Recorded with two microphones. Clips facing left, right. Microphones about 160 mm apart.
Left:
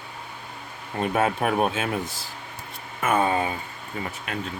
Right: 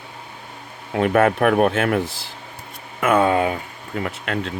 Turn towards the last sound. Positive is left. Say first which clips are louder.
# right 6 dB
turn(degrees=-80)